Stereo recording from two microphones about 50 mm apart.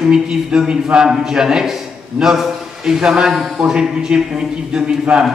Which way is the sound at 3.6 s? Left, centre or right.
Centre.